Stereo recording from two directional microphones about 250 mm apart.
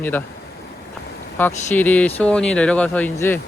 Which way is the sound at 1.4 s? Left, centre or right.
Centre.